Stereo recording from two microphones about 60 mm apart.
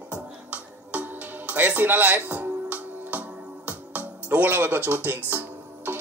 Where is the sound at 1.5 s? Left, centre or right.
Right.